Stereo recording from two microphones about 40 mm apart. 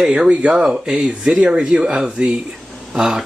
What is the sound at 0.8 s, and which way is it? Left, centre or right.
Speech, centre.